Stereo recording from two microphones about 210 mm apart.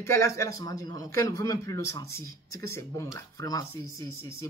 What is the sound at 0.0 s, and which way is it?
A man's voice, 15° left (ahead or behind).